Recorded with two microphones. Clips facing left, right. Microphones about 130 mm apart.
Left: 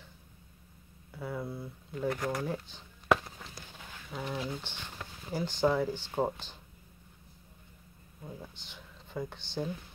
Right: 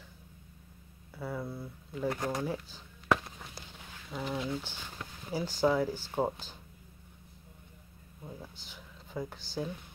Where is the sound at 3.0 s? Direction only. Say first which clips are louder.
Left 2 dB; centre (ahead or behind).